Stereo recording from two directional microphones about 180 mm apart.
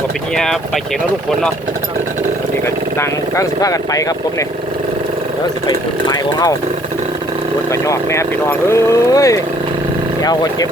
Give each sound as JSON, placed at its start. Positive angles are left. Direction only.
{"t": 3.0, "sound": "speech", "side_deg": 20}
{"t": 5.6, "sound": "speech", "side_deg": 20}
{"t": 7.9, "sound": "speech", "side_deg": 15}